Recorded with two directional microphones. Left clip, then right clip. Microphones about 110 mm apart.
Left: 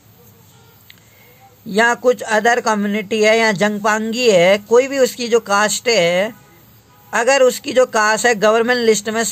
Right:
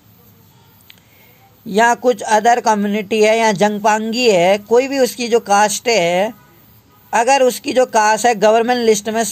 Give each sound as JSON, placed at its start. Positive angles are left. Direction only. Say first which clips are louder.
{"t": 1.7, "sound": "speech", "louder": "right 1 dB", "side_deg": -20}